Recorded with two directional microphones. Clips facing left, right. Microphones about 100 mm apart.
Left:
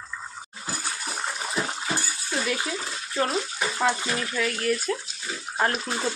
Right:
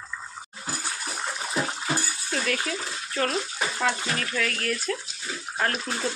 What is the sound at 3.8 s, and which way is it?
Speech, 10° left (ahead or behind).